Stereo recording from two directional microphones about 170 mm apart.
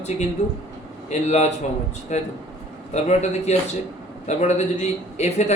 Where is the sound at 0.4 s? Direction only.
45° left (ahead or behind).